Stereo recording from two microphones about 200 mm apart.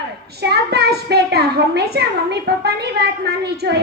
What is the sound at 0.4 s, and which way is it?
A woman's voice, 55° right (ahead or behind).